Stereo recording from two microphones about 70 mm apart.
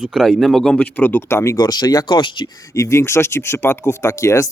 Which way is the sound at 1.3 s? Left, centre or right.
Left.